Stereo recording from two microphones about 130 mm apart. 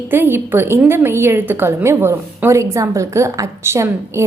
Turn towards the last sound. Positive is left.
turn(degrees=-20)  # may be behind; listen again after turning